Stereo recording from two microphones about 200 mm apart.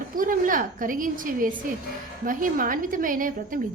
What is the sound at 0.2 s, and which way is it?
A woman's voice, 45° right (ahead or behind).